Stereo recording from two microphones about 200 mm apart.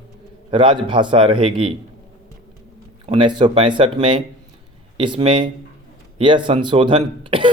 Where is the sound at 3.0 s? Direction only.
25° right (ahead or behind).